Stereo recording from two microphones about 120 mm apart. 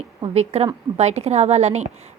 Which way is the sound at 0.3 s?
60° right (ahead or behind).